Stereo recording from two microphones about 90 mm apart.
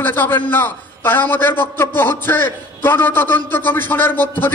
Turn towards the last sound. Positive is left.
turn(degrees=20)  # may be behind; listen again after turning